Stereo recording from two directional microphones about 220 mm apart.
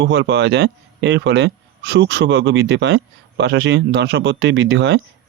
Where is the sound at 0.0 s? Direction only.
55° right (ahead or behind).